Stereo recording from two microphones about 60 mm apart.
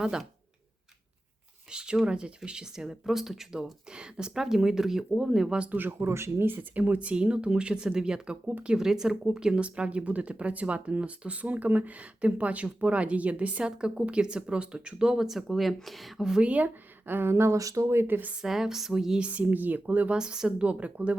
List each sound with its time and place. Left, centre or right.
1.7 s speech: centre
5.7 s speech: right; by 16.4 s centre
16.4 s speech: right
17.6 s speech: right
18.1 s speech: right
18.4 s speech: centre
19.3 s speech: right
20.1 s speech: centre